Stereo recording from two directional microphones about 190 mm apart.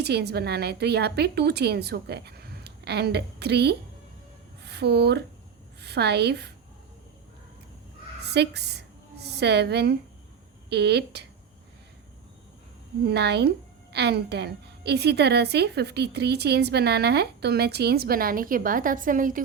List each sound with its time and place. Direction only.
0.0 s a woman's voice: 60° right (ahead or behind)
8.2 s a woman's voice: 60° right (ahead or behind)
13.1 s a woman's voice: 60° right (ahead or behind); by 19.4 s 45° right (ahead or behind)